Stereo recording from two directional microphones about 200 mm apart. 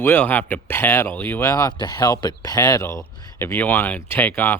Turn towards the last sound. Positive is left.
turn(degrees=10)  # may be behind; listen again after turning